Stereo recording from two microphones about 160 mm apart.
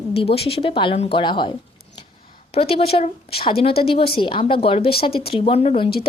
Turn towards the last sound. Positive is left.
turn(degrees=40)  # may be behind; listen again after turning